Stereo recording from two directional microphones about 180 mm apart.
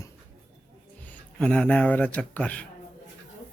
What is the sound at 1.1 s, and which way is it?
A man's voice, 5° left (ahead or behind).